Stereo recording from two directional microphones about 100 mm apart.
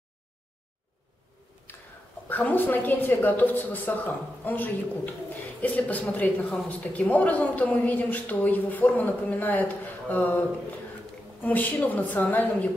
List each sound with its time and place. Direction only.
1.7 s a sound: 20° left (ahead or behind)
2.2 s a woman's voice: 15° left (ahead or behind)
11.4 s a woman's voice: 15° left (ahead or behind)